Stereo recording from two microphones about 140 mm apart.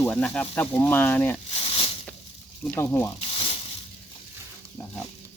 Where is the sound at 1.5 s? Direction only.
40° left (ahead or behind).